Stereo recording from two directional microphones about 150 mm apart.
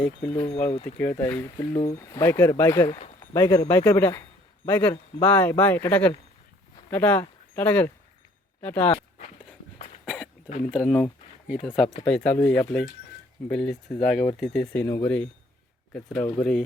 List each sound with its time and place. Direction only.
0.0 s speech: 10° left (ahead or behind)
0.5 s speech: 45° left (ahead or behind)
1.2 s speech: 15° left (ahead or behind)
1.7 s speech: 45° left (ahead or behind)
2.0 s a man's voice: 20° left (ahead or behind)
10.7 s speech: centre (ahead or behind)